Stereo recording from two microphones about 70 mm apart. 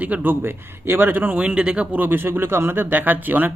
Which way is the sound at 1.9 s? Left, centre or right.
Right.